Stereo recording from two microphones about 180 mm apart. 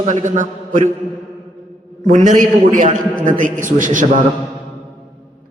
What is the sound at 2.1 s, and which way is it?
Speech, 45° right (ahead or behind).